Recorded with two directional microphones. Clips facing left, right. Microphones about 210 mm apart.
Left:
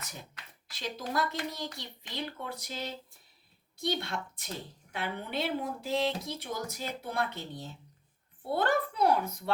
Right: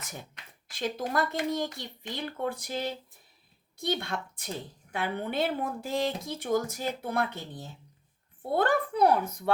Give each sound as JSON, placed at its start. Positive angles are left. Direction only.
{"t": 0.7, "sound": "speech", "side_deg": -50}
{"t": 8.4, "sound": "speech", "side_deg": -50}